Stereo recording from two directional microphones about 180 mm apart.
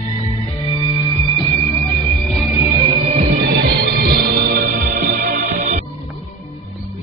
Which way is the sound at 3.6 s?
60° right (ahead or behind).